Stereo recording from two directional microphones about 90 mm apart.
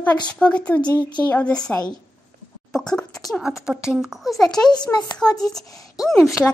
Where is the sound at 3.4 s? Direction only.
5° right (ahead or behind).